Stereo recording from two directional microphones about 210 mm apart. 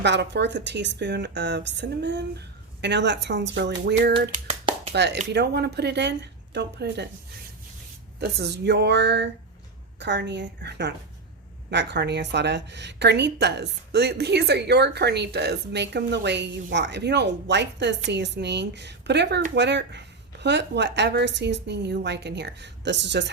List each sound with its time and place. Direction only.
0.0 s a woman's voice: 55° right (ahead or behind)
4.7 s a sound: 25° right (ahead or behind)
5.3 s a woman's voice: 50° right (ahead or behind)
8.2 s a woman's voice: 50° right (ahead or behind)